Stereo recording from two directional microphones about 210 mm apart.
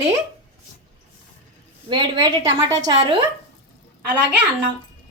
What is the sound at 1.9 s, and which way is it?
A woman's voice, 20° right (ahead or behind).